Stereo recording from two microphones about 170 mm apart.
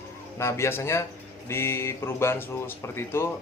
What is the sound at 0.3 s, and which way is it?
Speech, 15° left (ahead or behind).